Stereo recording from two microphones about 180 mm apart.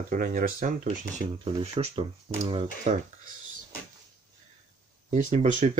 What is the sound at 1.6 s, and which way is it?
Speech, 35° right (ahead or behind).